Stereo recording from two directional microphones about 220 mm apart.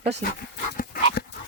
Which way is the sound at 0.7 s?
45° left (ahead or behind).